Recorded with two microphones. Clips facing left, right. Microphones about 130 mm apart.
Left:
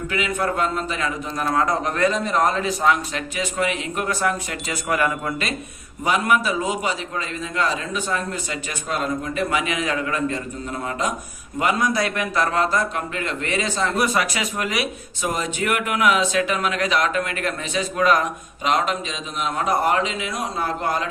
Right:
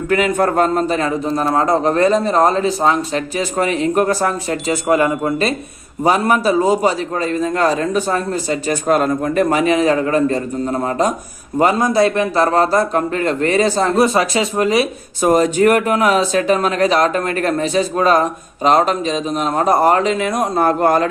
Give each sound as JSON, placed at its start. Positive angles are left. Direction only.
{"t": 0.1, "sound": "speech", "side_deg": -50}
{"t": 15.3, "sound": "speech", "side_deg": -45}